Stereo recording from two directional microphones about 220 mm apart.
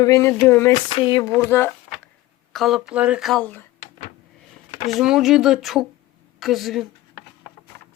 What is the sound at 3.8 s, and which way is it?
Power windows, 40° left (ahead or behind).